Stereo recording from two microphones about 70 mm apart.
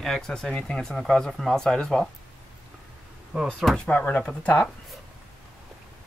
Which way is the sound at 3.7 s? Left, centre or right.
Centre.